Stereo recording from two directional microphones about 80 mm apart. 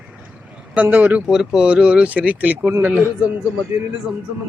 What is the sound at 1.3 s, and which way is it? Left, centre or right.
A man's voice, centre.